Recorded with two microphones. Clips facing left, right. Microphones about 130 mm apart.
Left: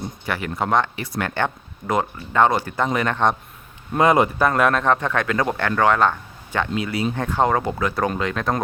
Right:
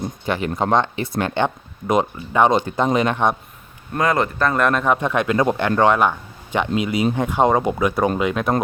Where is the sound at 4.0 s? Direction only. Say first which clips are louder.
Left 3 dB; 20° left (ahead or behind).